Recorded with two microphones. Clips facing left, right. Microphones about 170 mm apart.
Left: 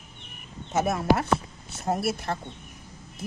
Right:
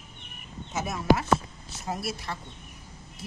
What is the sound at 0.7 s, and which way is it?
Speech, 55° left (ahead or behind).